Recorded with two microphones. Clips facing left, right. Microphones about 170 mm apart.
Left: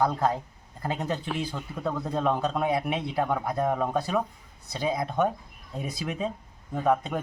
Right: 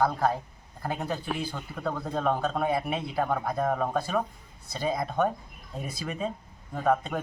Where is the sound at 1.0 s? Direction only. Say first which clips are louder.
Left 1 dB; 5° right (ahead or behind).